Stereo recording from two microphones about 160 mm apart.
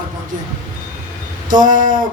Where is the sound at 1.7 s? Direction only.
55° right (ahead or behind).